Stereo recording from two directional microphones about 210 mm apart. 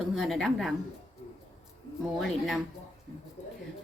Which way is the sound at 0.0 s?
Centre (ahead or behind).